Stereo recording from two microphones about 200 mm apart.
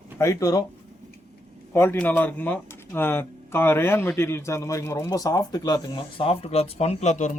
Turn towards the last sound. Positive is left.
turn(degrees=35)  # may be behind; listen again after turning